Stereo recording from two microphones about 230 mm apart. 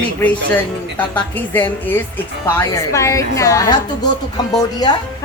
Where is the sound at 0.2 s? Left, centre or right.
Centre.